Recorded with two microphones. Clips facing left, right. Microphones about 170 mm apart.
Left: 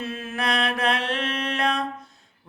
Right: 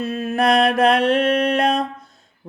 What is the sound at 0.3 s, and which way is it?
Mantra, 55° right (ahead or behind).